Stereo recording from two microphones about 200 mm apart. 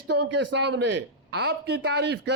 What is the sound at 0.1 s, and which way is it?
Speech, 60° right (ahead or behind).